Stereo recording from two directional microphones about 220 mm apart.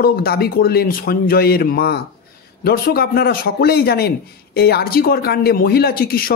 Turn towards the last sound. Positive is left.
turn(degrees=40)  # may be behind; listen again after turning